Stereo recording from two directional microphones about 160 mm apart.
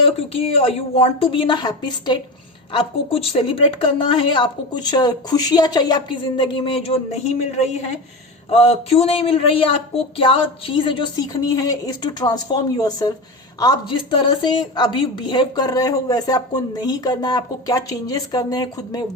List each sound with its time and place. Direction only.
0.0 s a woman's voice: 40° left (ahead or behind)